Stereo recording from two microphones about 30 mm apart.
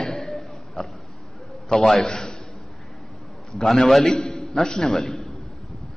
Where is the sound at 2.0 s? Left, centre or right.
Left.